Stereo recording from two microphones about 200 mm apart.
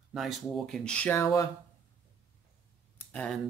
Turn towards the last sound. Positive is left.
turn(degrees=5)  # may be behind; listen again after turning